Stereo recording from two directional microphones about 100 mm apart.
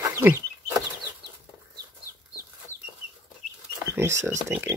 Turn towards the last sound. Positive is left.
turn(degrees=-30)  # may be behind; listen again after turning